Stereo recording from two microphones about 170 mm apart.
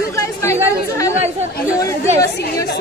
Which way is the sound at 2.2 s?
85° left.